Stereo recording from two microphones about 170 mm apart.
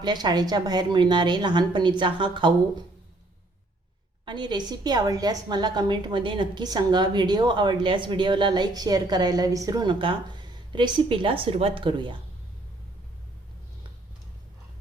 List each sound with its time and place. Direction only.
0.0 s a woman's voice: 25° right (ahead or behind)
4.3 s a woman's voice: 25° right (ahead or behind)